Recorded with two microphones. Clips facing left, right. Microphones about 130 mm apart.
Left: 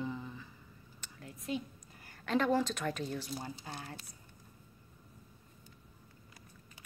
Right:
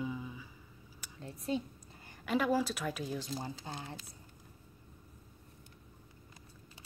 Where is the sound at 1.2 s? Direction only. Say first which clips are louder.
Right 3 dB; 30° right (ahead or behind).